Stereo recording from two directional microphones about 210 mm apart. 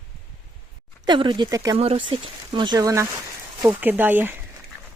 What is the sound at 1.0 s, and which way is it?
Speech, 25° right (ahead or behind).